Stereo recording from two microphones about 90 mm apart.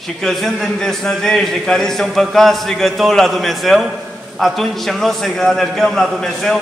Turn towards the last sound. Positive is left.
turn(degrees=5)  # may be behind; listen again after turning